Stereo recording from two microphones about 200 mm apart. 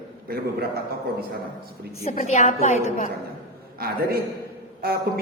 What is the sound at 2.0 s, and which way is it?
Speech, 35° left (ahead or behind).